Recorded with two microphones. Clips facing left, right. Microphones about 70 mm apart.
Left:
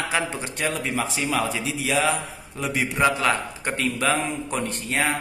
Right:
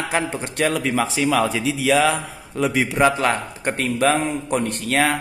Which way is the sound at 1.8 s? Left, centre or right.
Right.